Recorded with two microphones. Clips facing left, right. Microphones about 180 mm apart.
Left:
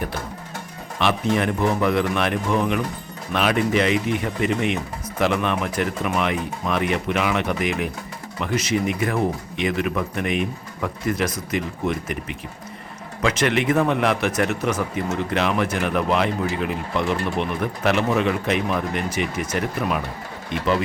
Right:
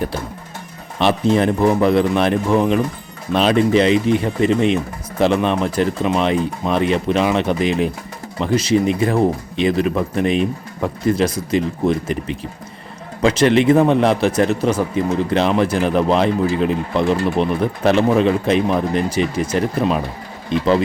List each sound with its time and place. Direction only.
0.9 s speech: 30° right (ahead or behind)